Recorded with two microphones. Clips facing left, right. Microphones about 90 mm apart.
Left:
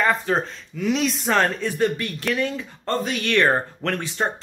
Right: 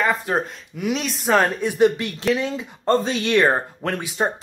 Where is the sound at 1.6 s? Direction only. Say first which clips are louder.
Right 5 dB; 15° right (ahead or behind).